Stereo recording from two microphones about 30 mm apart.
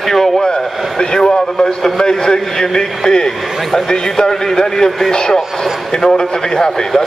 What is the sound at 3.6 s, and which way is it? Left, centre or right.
A man's voice, centre.